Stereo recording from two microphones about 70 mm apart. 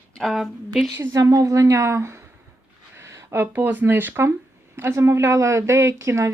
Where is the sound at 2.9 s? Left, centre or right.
Right.